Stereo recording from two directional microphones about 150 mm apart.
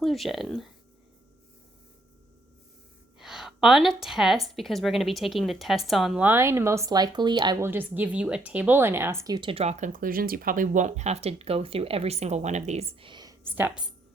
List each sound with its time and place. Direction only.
0.0 s a woman's voice: centre (ahead or behind)
3.2 s a woman's voice: 5° right (ahead or behind)
6.2 s speech: 15° right (ahead or behind)
7.6 s speech: 15° right (ahead or behind); by 13.1 s 45° right (ahead or behind)
13.1 s a sound: 30° right (ahead or behind)
13.4 s speech: 15° right (ahead or behind)